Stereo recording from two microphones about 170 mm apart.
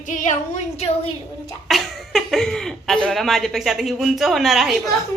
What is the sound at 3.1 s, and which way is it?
A woman's voice, centre (ahead or behind).